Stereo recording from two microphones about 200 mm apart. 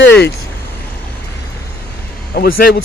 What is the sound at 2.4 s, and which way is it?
Speech, 55° left (ahead or behind).